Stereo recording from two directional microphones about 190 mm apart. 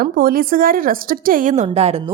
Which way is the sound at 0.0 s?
50° right (ahead or behind).